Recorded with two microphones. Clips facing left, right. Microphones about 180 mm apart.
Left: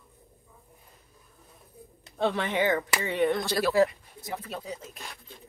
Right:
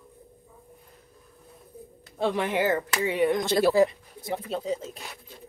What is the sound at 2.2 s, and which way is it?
A woman's voice, 10° right (ahead or behind).